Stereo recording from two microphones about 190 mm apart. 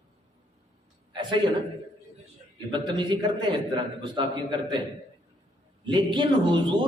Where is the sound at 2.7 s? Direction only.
25° right (ahead or behind).